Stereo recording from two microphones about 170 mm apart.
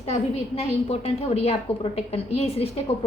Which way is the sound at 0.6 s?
35° left (ahead or behind).